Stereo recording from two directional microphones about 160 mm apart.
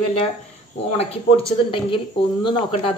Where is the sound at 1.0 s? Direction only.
35° left (ahead or behind).